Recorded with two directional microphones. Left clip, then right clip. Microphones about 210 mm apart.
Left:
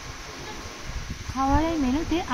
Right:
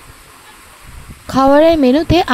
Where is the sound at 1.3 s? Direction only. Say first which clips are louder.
Right 15 dB; 45° right (ahead or behind).